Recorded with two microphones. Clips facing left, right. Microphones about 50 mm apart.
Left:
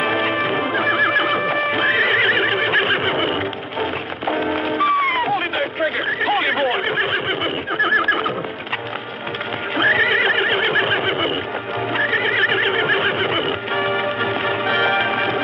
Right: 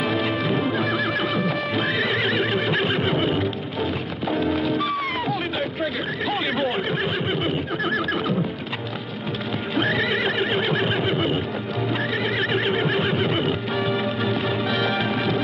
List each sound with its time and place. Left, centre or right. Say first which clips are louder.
0.0 s music: left 4 dB; left
0.7 s horse: left 6 dB; left
4.6 s music: left 5 dB; left
5.3 s chatter: left 5 dB; left
6.7 s neigh: left 5 dB; left
9.8 s neigh: left 6 dB; left
14.6 s music: left 5 dB; left